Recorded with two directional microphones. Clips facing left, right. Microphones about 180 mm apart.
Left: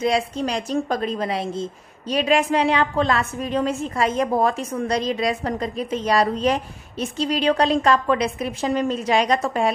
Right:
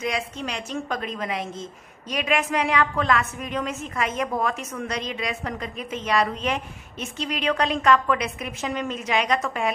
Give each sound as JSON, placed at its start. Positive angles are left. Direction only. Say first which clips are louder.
{"t": 0.0, "sound": "a woman's voice", "louder": "left 7 dB", "side_deg": 35}